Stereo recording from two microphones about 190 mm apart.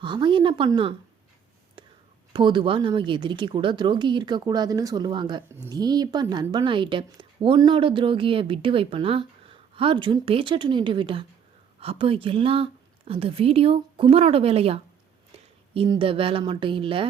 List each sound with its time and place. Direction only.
0.0 s a woman's voice: 25° right (ahead or behind)
1.8 s whispering: 25° right (ahead or behind)
2.3 s a woman's voice: 25° right (ahead or behind)